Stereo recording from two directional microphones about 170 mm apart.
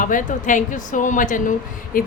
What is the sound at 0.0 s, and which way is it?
A woman's voice, 50° left (ahead or behind).